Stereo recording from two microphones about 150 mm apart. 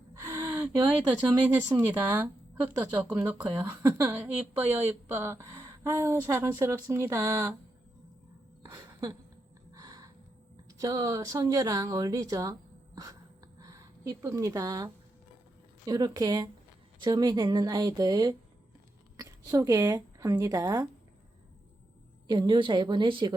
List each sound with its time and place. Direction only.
0.1 s speech: 20° right (ahead or behind)
8.6 s a sound: 25° right (ahead or behind)
10.7 s speech: 25° right (ahead or behind)
13.6 s speech: 20° right (ahead or behind)
15.9 s a woman's voice: 25° right (ahead or behind)
22.3 s a woman's voice: 30° right (ahead or behind)